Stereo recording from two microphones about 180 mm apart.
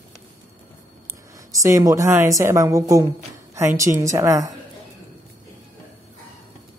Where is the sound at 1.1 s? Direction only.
20° right (ahead or behind).